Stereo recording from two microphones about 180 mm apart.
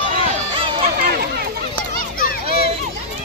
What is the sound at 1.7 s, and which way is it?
Children playing, 50° left (ahead or behind).